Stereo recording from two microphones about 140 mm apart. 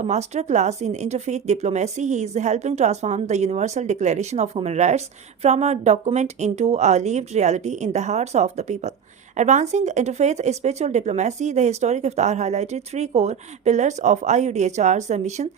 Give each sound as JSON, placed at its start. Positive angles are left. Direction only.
{"t": 0.0, "sound": "speech", "side_deg": -55}